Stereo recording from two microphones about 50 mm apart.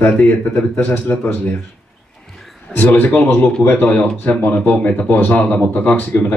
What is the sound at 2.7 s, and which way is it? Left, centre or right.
A man's voice, left.